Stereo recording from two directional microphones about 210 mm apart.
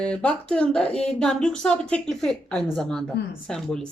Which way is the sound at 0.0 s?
5° left (ahead or behind).